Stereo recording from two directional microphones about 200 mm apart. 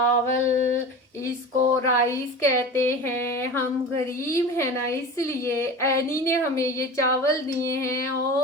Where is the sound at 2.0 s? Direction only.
15° left (ahead or behind).